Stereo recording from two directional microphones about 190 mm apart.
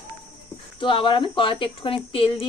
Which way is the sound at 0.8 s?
25° left (ahead or behind).